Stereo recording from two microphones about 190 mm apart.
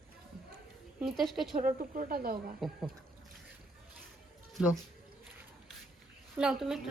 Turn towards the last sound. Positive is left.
turn(degrees=0)  # may be behind; listen again after turning